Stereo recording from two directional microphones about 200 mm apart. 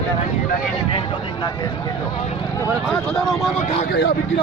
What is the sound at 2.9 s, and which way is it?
Speech, centre (ahead or behind).